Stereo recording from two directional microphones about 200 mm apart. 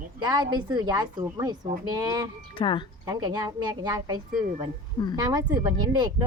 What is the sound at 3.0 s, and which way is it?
Speech, 20° right (ahead or behind).